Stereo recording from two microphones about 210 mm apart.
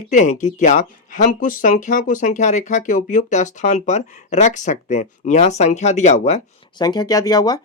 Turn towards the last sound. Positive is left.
turn(degrees=20)  # may be behind; listen again after turning